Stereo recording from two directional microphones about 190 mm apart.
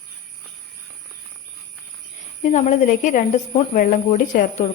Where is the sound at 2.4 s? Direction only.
40° left (ahead or behind).